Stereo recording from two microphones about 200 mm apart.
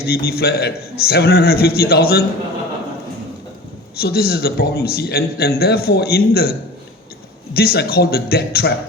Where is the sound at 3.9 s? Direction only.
50° left (ahead or behind).